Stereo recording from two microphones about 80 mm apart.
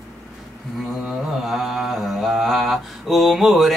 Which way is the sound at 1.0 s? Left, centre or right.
Centre.